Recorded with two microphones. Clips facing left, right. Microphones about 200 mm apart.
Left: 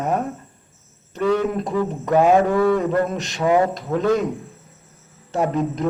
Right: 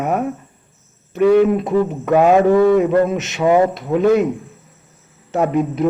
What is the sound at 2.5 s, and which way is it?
A man's voice, 20° right (ahead or behind).